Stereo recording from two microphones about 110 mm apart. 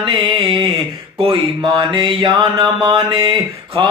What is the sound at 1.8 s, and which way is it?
Mantra, 30° right (ahead or behind).